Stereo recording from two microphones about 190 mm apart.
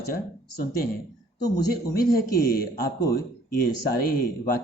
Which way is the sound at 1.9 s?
50° left (ahead or behind).